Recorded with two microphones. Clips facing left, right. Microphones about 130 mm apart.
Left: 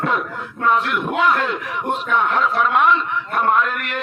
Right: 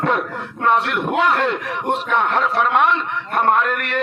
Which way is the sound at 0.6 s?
65° right (ahead or behind).